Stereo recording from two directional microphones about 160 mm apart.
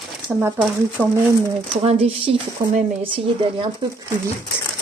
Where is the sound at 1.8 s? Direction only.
40° right (ahead or behind).